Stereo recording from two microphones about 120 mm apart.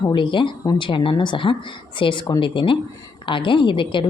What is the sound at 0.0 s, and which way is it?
A woman's voice, 40° left (ahead or behind).